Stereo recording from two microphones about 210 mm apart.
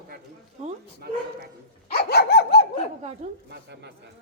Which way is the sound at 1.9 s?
50° left (ahead or behind).